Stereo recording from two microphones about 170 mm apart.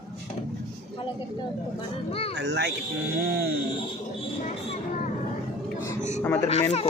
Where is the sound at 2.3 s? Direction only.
90° right.